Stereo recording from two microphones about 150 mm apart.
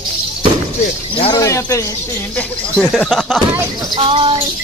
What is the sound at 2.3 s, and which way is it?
Speech, 5° left (ahead or behind).